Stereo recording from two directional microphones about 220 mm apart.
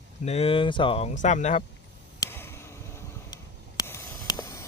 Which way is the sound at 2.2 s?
10° left (ahead or behind).